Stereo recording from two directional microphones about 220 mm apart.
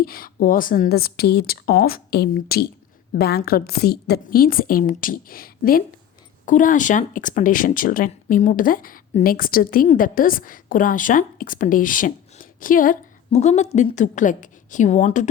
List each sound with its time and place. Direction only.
0.0 s a woman's voice: 40° left (ahead or behind)